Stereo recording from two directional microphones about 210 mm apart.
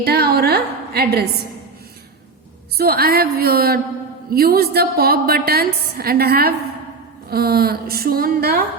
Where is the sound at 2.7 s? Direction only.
45° right (ahead or behind).